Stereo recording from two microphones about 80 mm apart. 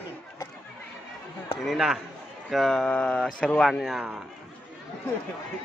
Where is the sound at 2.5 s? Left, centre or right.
Centre.